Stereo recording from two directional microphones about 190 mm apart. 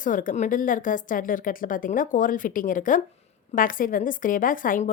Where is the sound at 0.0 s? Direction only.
45° left (ahead or behind).